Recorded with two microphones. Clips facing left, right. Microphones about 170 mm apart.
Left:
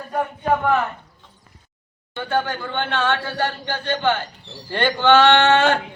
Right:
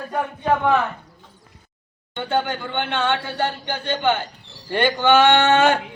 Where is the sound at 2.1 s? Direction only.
20° right (ahead or behind).